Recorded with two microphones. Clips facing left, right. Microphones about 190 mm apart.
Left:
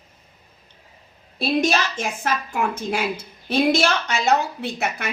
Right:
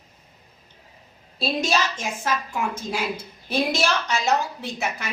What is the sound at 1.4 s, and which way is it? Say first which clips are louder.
A woman's voice: left 3 dB; 55° left (ahead or behind).